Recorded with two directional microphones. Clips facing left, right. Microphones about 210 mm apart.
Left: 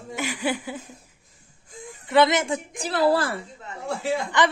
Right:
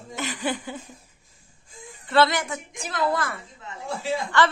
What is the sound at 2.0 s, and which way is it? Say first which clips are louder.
A woman's voice: left 2 dB; 15° left (ahead or behind).